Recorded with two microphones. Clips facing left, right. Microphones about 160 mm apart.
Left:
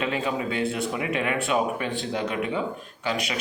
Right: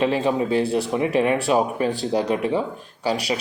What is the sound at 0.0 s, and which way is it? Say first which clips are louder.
Speech: right 6 dB; 35° right (ahead or behind).